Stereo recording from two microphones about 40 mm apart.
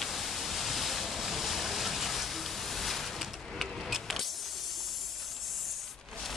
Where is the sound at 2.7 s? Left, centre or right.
Centre.